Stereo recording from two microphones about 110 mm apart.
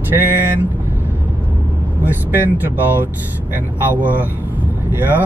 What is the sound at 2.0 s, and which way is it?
Speech, 15° right (ahead or behind).